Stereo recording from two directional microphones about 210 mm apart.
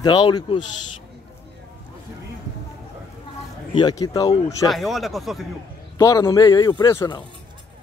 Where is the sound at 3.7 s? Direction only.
20° left (ahead or behind).